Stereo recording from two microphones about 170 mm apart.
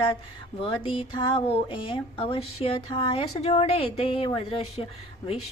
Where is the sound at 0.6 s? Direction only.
30° left (ahead or behind).